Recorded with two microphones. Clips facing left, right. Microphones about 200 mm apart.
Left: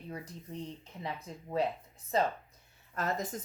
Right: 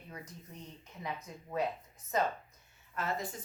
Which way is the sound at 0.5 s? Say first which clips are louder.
Left 8 dB; 30° left (ahead or behind).